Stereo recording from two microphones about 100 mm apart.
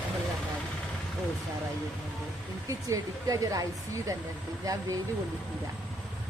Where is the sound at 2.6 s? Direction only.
35° right (ahead or behind).